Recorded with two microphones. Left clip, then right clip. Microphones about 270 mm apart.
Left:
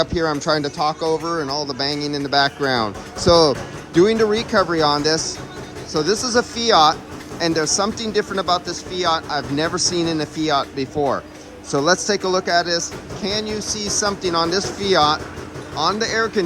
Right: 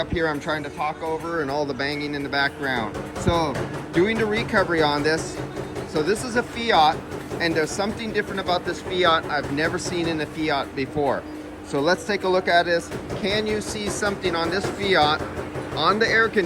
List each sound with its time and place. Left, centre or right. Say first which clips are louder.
0.1 s speech: left 5 dB; centre
11.9 s speech: left 3 dB; centre